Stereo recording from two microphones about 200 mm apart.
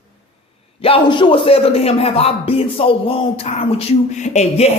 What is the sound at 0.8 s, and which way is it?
A man's voice, 25° left (ahead or behind).